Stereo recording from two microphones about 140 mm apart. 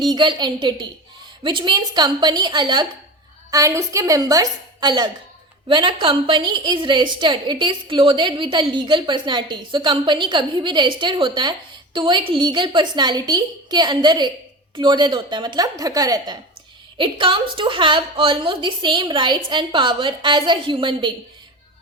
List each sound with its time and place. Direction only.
0.1 s a woman's voice: 35° right (ahead or behind)